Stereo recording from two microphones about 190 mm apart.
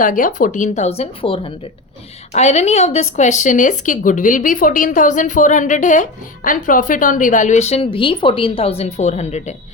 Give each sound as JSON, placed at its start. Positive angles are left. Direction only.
{"t": 0.0, "sound": "speech", "side_deg": 45}